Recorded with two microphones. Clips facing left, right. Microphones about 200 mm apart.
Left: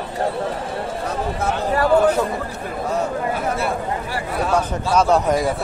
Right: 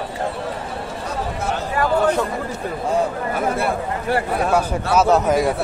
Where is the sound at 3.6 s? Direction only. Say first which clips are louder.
Right 1 dB; 60° right (ahead or behind).